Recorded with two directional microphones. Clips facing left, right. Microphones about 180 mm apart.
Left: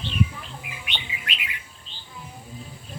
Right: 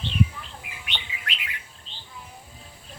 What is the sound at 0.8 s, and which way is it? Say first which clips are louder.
Bird: left 1 dB; 15° left (ahead or behind).